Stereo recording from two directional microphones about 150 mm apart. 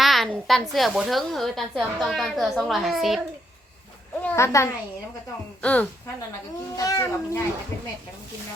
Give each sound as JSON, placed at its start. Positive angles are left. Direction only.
{"t": 0.0, "sound": "a sound", "side_deg": 0}
{"t": 0.4, "sound": "a woman's voice", "side_deg": 0}
{"t": 4.2, "sound": "a child's voice", "side_deg": 20}
{"t": 6.7, "sound": "speech", "side_deg": 25}